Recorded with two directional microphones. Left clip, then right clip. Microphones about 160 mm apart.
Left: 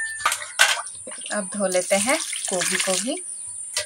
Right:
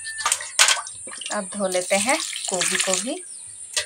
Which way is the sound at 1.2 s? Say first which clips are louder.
Even; centre (ahead or behind).